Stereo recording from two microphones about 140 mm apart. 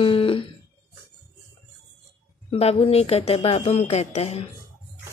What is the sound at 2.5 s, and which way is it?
Speech, 45° left (ahead or behind).